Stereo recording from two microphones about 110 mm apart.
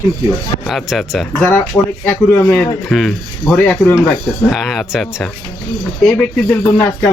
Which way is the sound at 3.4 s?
15° left (ahead or behind).